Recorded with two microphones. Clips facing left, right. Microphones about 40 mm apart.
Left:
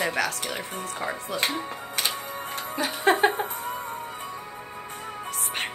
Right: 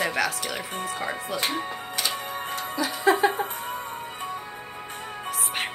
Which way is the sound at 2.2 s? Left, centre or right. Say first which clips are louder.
Right 2 dB; right.